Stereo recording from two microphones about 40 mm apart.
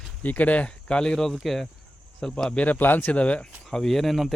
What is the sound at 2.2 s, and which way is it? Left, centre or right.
Speech, centre.